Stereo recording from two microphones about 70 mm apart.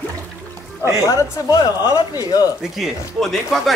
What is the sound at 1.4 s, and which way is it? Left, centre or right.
Speech, left.